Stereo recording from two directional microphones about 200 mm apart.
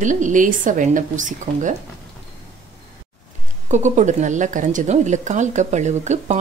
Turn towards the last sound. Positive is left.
turn(degrees=-35)  # may be behind; listen again after turning